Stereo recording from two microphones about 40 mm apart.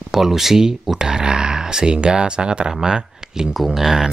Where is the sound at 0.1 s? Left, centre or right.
Centre.